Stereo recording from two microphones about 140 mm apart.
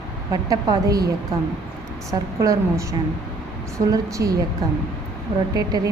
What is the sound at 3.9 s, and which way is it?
Speech, 25° right (ahead or behind).